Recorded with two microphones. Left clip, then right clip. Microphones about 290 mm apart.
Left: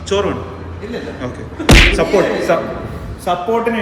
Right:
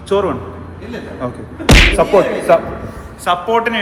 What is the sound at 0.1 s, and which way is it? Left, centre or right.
Speech, centre.